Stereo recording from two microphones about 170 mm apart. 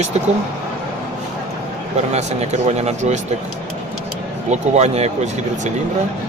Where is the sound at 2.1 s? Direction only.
40° right (ahead or behind).